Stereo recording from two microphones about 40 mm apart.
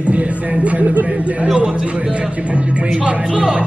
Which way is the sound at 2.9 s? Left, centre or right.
Right.